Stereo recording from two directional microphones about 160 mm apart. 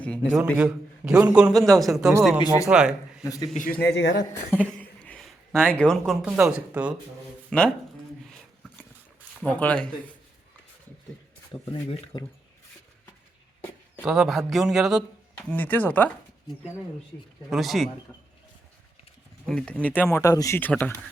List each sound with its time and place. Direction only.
0.5 s a man's voice: 10° right (ahead or behind)
3.2 s speech: 20° left (ahead or behind)
3.7 s speech: 90° left
4.5 s a sound: 10° left (ahead or behind)
5.5 s a man's voice: 5° left (ahead or behind)
7.5 s a man's voice: 5° left (ahead or behind)
9.4 s speech: 10° left (ahead or behind)
11.7 s speech: 35° left (ahead or behind)
14.0 s a man's voice: 5° right (ahead or behind)
17.5 s a man's voice: centre (ahead or behind)
19.5 s a man's voice: 5° left (ahead or behind)